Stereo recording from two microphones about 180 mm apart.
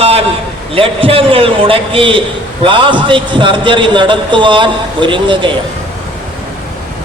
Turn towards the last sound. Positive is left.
turn(degrees=-25)  # may be behind; listen again after turning